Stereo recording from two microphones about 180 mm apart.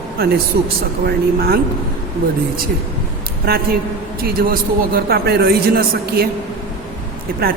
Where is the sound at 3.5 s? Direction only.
55° right (ahead or behind).